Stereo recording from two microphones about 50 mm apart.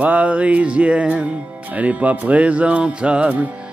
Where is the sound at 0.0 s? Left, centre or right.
Right.